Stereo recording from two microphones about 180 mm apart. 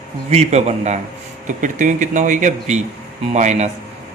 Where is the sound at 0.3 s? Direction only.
35° right (ahead or behind).